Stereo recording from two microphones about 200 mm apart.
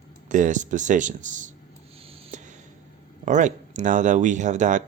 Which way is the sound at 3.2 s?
40° right (ahead or behind).